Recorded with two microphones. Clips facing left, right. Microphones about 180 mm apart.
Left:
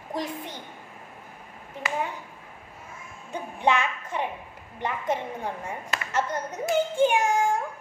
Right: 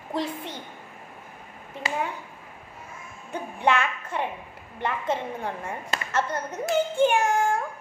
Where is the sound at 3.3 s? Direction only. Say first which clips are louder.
Even; 15° left (ahead or behind).